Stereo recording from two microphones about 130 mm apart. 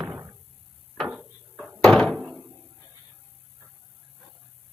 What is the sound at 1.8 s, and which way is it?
Door, 5° left (ahead or behind).